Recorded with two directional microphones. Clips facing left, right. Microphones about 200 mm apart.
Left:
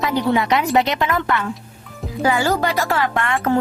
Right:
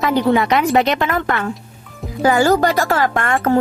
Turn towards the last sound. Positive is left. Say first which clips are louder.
# right 3 dB
turn(degrees=-45)  # may be behind; listen again after turning